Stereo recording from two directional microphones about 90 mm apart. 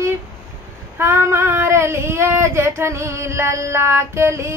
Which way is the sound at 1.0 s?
30° right (ahead or behind).